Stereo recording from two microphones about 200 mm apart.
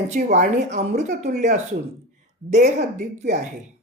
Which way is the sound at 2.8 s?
35° right (ahead or behind).